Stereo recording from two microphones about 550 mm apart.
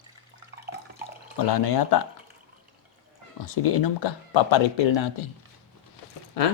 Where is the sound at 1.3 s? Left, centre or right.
Left.